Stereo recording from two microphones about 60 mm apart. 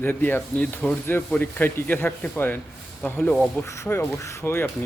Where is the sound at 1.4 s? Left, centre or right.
Left.